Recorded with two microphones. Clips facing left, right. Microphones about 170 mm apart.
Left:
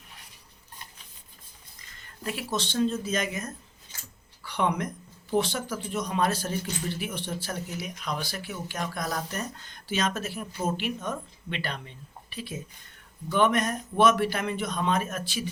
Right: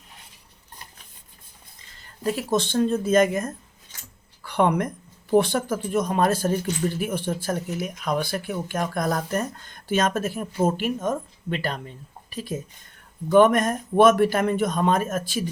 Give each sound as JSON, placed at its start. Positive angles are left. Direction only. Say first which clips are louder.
{"t": 2.0, "sound": "speech", "louder": "right 8 dB", "side_deg": -40}